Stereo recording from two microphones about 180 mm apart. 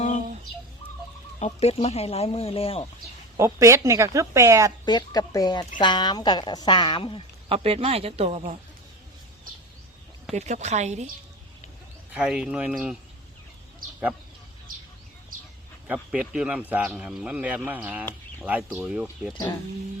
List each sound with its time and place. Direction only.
1.5 s speech: 35° left (ahead or behind)
3.3 s speech: 15° right (ahead or behind)
4.9 s a woman's voice: 20° left (ahead or behind)
7.4 s speech: 30° right (ahead or behind)
10.3 s speech: 40° right (ahead or behind)
12.1 s speech: 5° right (ahead or behind)
15.9 s speech: 5° right (ahead or behind)
19.3 s a woman's voice: 20° left (ahead or behind)